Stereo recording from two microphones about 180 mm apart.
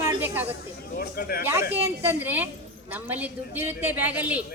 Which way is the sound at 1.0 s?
60° left (ahead or behind).